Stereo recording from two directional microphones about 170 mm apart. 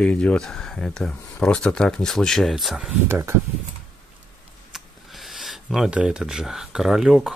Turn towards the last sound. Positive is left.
turn(degrees=0)  # may be behind; listen again after turning